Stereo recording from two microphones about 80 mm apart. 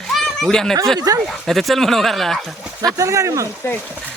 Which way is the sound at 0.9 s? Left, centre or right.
Right.